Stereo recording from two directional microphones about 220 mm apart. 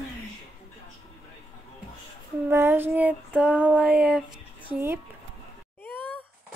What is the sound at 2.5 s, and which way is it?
Child singing, 10° right (ahead or behind).